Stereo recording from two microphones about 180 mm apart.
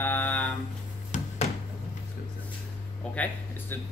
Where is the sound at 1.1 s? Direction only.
45° left (ahead or behind).